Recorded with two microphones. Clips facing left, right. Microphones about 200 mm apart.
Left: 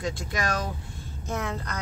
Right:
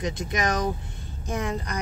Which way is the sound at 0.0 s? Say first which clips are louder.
Right 3 dB; 20° right (ahead or behind).